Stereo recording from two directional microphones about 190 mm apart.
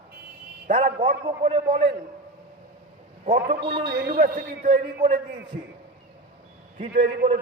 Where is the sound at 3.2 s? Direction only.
40° right (ahead or behind).